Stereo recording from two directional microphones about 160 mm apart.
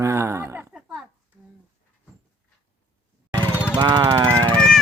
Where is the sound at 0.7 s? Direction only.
5° right (ahead or behind).